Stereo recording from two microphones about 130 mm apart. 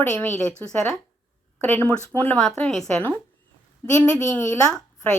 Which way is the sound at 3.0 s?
15° left (ahead or behind).